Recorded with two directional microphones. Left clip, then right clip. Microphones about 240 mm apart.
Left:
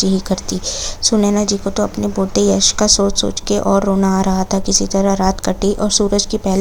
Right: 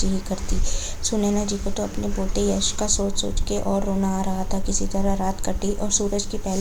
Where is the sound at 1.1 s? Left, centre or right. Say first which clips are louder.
Left 7 dB; left.